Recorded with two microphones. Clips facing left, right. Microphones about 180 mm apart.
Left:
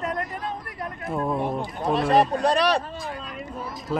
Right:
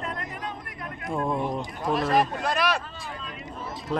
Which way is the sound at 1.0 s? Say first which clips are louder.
Left 1 dB; 5° left (ahead or behind).